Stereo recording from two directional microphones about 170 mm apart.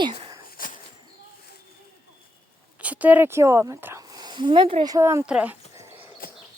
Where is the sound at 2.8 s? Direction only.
10° right (ahead or behind); by 4.9 s 30° right (ahead or behind).